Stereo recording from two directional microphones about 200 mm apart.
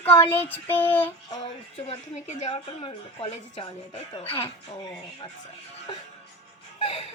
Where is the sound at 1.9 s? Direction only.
35° left (ahead or behind).